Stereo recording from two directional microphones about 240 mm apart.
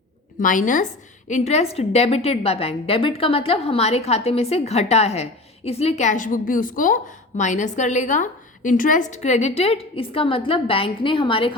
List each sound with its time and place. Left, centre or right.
0.3 s a woman's voice: left